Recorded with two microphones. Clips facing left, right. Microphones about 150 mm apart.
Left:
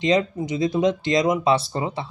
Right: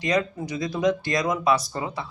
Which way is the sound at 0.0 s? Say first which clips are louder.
Left 4 dB; 25° left (ahead or behind).